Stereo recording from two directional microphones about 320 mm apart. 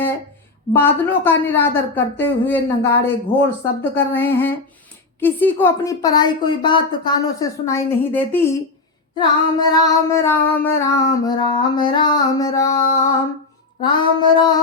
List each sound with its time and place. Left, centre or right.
0.7 s female singing: centre
13.8 s female singing: centre